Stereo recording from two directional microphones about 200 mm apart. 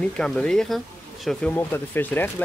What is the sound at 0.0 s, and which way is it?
Speech, 5° left (ahead or behind).